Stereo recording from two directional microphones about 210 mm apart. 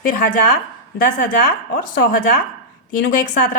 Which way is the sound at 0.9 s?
45° left (ahead or behind).